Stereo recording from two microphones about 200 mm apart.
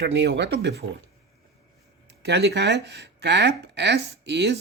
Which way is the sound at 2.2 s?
55° right (ahead or behind).